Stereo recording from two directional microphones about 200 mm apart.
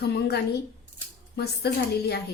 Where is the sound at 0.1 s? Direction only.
55° left (ahead or behind).